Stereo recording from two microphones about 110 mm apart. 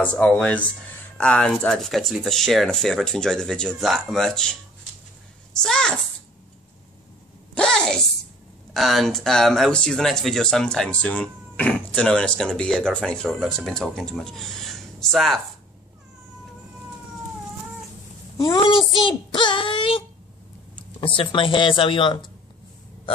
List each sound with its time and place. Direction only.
0.0 s a child's voice: 10° left (ahead or behind)
7.5 s a sound: 5° left (ahead or behind)
8.7 s speech: centre (ahead or behind)
18.4 s a child's voice: 35° left (ahead or behind)
18.9 s child singing: 50° left (ahead or behind)
21.2 s child singing: 50° left (ahead or behind)